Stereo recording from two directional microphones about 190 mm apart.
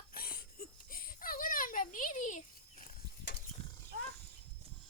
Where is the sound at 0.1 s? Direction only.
50° left (ahead or behind).